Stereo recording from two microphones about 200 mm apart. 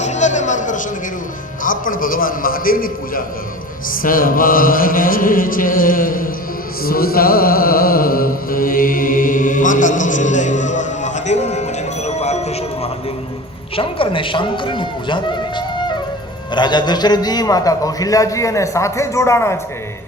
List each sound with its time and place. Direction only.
0.0 s speech: 35° left (ahead or behind)
1.6 s chant: 45° left (ahead or behind)
6.8 s a sound: 50° left (ahead or behind); by 12.9 s 30° left (ahead or behind)
13.7 s a man's voice: 25° left (ahead or behind)